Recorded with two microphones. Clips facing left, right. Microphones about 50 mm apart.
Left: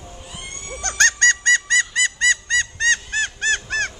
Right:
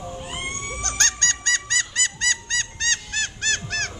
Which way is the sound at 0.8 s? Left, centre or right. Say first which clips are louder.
Left 9 dB; left.